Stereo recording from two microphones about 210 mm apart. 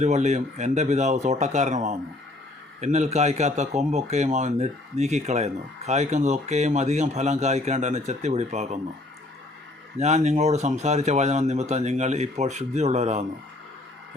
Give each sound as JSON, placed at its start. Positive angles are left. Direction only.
{"t": 0.0, "sound": "a man's voice", "side_deg": -35}
{"t": 10.0, "sound": "a man's voice", "side_deg": -30}